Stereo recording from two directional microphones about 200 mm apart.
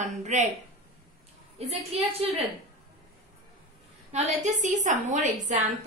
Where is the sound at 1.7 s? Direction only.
30° right (ahead or behind).